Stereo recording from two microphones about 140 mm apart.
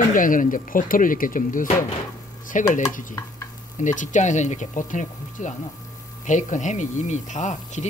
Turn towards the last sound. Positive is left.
turn(degrees=60)  # may be behind; listen again after turning